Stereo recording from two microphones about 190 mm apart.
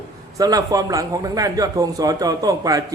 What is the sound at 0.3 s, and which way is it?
A man's voice, 20° right (ahead or behind).